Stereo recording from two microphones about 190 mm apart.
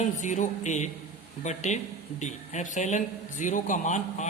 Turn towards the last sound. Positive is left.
turn(degrees=40)  # may be behind; listen again after turning